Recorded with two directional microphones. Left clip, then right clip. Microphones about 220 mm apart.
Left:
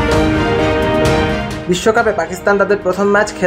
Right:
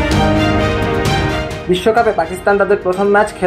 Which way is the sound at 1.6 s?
20° left (ahead or behind).